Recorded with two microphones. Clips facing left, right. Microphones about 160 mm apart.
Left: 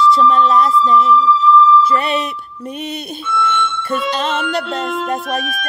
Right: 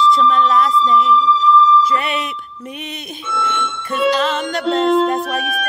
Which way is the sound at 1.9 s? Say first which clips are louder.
Left 3 dB; 35° left (ahead or behind).